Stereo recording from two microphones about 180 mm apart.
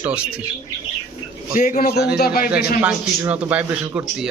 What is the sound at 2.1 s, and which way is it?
Speech, 60° left (ahead or behind).